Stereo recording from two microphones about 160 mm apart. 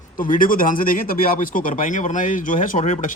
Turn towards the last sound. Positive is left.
turn(degrees=50)  # may be behind; listen again after turning